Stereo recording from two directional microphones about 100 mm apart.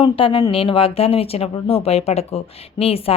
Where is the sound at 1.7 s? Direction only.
90° left.